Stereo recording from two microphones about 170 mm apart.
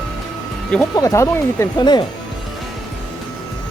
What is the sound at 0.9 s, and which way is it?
Speech, 20° left (ahead or behind).